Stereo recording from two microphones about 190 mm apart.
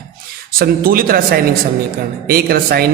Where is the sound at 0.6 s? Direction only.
50° right (ahead or behind).